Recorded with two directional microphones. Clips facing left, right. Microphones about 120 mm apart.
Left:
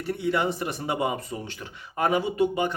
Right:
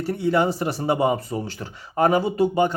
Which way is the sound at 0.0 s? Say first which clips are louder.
Right 5 dB; 35° right (ahead or behind).